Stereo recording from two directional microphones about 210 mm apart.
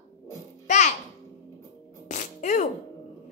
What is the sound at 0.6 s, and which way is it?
Music, 35° left (ahead or behind).